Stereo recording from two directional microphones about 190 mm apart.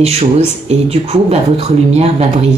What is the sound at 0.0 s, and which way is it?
Speech, 30° right (ahead or behind).